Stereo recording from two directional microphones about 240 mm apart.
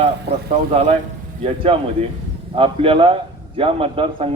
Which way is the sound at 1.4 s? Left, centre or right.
Right.